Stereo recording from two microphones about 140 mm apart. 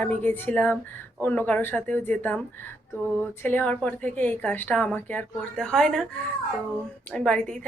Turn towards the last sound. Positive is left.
turn(degrees=5)  # may be behind; listen again after turning